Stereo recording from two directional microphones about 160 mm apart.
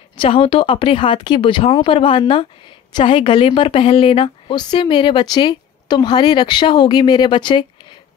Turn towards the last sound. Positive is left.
turn(degrees=30)  # may be behind; listen again after turning